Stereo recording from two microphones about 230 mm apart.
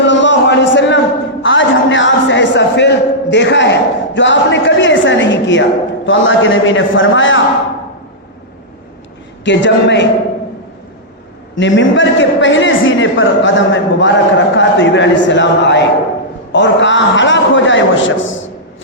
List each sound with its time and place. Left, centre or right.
0.1 s a sound: left
6.1 s a man's voice: left
9.4 s a man's voice: left
11.5 s a man's voice: left